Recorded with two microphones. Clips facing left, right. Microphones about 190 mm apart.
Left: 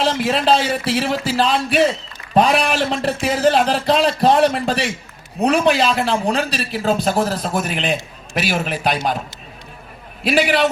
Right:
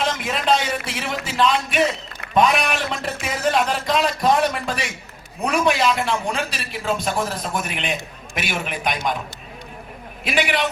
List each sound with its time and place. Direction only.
0.0 s a man's voice: 30° left (ahead or behind)
10.2 s a man's voice: 35° left (ahead or behind)